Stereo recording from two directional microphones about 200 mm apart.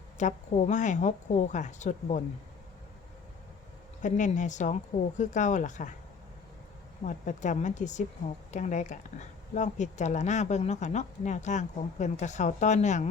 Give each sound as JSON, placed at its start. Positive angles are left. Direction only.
{"t": 0.2, "sound": "speech", "side_deg": 35}
{"t": 4.0, "sound": "speech", "side_deg": 40}
{"t": 7.0, "sound": "speech", "side_deg": 40}